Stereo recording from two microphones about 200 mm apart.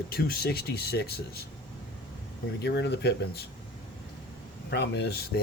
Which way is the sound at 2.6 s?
60° left (ahead or behind).